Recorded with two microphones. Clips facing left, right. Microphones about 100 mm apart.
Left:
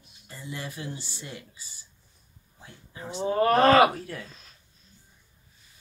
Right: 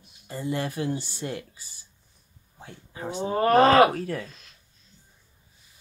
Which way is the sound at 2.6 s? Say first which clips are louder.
Right 5 dB; 85° right.